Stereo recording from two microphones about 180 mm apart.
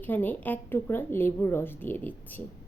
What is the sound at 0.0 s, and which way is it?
A woman's voice, 10° left (ahead or behind).